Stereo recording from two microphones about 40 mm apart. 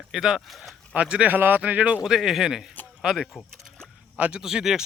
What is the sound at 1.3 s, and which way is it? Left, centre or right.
Speech, right.